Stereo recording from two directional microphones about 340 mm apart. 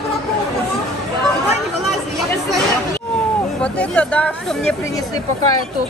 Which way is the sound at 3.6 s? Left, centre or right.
Centre.